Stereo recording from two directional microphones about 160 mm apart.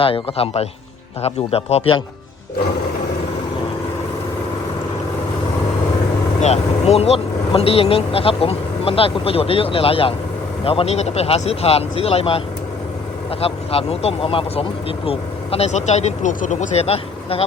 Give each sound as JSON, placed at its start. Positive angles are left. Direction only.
{"t": 0.0, "sound": "speech", "side_deg": 35}
{"t": 6.4, "sound": "speech", "side_deg": 40}
{"t": 13.4, "sound": "speech", "side_deg": 35}